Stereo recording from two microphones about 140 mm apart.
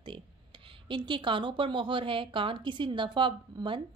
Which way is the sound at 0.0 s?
35° right (ahead or behind).